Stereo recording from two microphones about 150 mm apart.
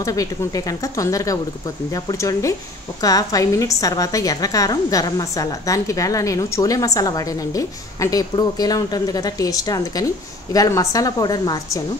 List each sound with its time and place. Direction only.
0.0 s a woman's voice: 20° left (ahead or behind)